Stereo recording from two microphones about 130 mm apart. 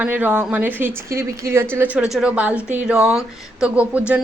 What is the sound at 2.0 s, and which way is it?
A man's voice, 5° right (ahead or behind).